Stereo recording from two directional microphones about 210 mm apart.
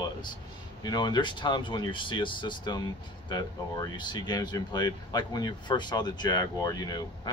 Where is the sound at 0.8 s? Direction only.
20° left (ahead or behind).